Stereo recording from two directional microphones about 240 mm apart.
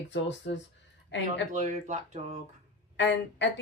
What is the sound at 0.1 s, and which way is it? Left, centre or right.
Speech, left.